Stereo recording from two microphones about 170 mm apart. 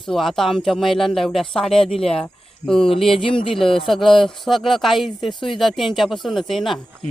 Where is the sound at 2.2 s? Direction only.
5° left (ahead or behind).